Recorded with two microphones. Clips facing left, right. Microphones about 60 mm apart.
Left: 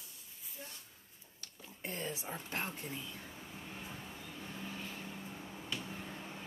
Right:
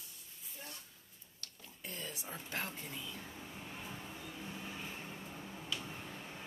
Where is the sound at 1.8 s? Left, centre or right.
Left.